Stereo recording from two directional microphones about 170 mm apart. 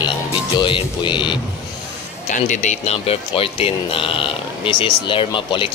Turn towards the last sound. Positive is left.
turn(degrees=30)  # may be behind; listen again after turning